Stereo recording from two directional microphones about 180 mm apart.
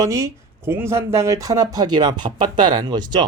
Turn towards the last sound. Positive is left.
turn(degrees=-25)  # may be behind; listen again after turning